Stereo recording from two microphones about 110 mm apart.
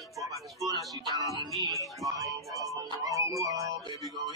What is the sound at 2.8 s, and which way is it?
Speech, 30° right (ahead or behind).